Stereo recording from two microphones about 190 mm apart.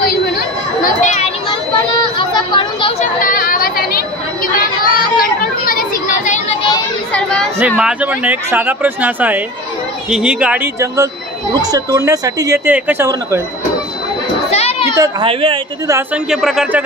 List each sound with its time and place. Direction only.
0.0 s chatter: 50° left (ahead or behind)
2.1 s chatter: 25° left (ahead or behind)
3.2 s chatter: 45° left (ahead or behind)
7.1 s chatter: 5° left (ahead or behind)
7.5 s speech: 5° right (ahead or behind)
14.5 s children playing: 35° left (ahead or behind)
15.0 s a woman's voice: 25° right (ahead or behind)
16.3 s a man's voice: centre (ahead or behind)